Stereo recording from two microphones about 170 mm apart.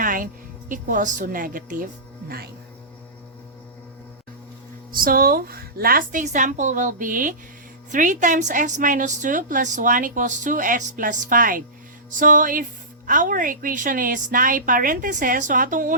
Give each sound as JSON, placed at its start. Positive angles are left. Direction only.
{"t": 0.0, "sound": "music", "side_deg": -55}
{"t": 0.7, "sound": "a woman's voice", "side_deg": -50}
{"t": 4.9, "sound": "a woman's voice", "side_deg": -60}